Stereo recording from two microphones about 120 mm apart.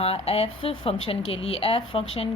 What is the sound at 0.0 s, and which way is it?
A woman's voice, 55° left (ahead or behind).